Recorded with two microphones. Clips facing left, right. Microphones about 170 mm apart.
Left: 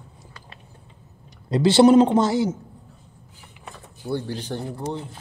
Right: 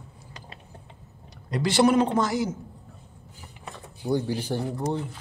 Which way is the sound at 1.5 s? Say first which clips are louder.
Left 7 dB; 30° left (ahead or behind).